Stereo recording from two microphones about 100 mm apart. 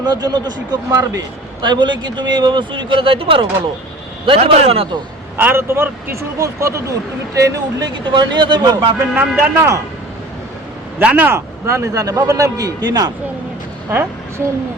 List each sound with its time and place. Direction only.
0.0 s speech: 45° right (ahead or behind)
1.6 s speech: 50° right (ahead or behind)
4.3 s a man's voice: 80° right
5.4 s speech: 20° right (ahead or behind); by 8.7 s 50° right (ahead or behind)
9.1 s speech: 15° right (ahead or behind)
11.0 s a man's voice: 15° right (ahead or behind); by 13.1 s 40° right (ahead or behind)
13.9 s a woman's voice: 20° right (ahead or behind)